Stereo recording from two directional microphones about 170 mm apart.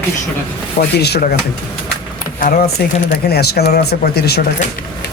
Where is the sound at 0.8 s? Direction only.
70° left (ahead or behind).